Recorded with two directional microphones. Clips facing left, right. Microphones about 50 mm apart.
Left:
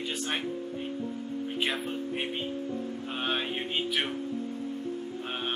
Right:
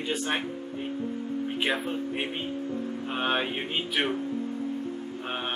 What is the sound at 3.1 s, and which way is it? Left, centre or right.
Speech, centre.